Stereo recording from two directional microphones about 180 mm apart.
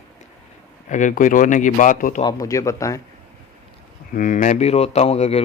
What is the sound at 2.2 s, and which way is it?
Speech, 20° left (ahead or behind).